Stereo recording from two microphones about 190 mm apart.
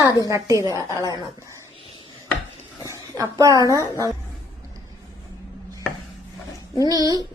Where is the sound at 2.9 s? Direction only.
15° right (ahead or behind).